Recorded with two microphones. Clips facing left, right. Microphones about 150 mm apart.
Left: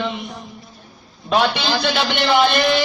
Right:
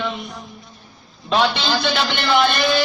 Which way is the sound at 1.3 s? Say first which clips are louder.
Left 1 dB; 10° left (ahead or behind).